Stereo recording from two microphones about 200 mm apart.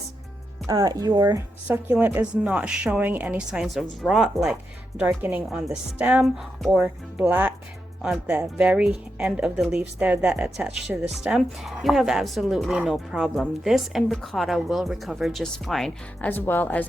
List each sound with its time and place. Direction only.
0.7 s speech: 20° right (ahead or behind)
1.6 s a woman's voice: 10° right (ahead or behind); by 16.8 s 10° left (ahead or behind)